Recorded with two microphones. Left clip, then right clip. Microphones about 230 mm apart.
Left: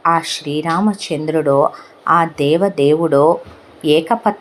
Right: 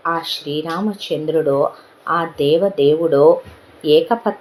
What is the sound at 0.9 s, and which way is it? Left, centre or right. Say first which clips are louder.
Speech: even; left.